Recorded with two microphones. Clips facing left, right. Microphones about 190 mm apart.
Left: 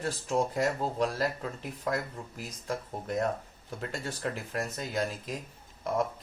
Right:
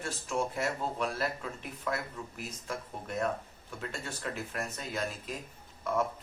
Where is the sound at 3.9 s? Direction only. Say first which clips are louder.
Left 5 dB; 35° left (ahead or behind).